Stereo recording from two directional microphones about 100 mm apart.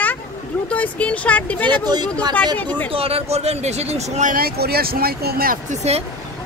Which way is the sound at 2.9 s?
75° right (ahead or behind).